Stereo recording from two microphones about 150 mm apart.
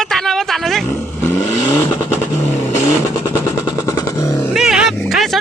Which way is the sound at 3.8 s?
20° left (ahead or behind).